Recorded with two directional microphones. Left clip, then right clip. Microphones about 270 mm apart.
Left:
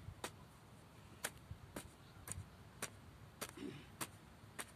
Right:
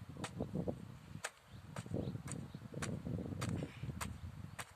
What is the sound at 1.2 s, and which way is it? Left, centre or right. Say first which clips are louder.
Arrow: right 1 dB; centre.